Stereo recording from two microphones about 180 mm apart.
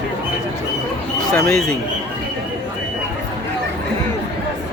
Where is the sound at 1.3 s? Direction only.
5° left (ahead or behind).